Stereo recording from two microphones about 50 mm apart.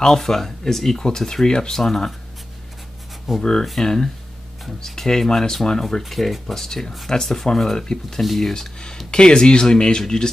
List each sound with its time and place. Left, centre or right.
0.0 s speech: centre
3.3 s speech: centre
3.8 s speech: centre